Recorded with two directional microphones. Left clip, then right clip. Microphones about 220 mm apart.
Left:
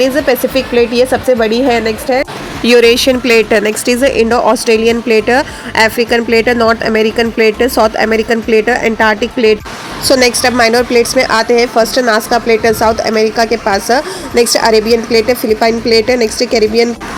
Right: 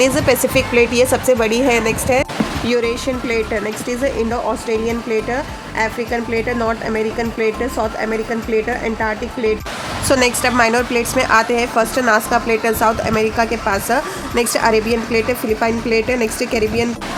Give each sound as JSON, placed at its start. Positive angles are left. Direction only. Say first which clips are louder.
{"t": 0.0, "sound": "a woman's voice", "louder": "left 4 dB", "side_deg": 5}
{"t": 2.6, "sound": "speech", "louder": "left 13 dB", "side_deg": 30}
{"t": 10.1, "sound": "a woman's voice", "louder": "left 6 dB", "side_deg": 10}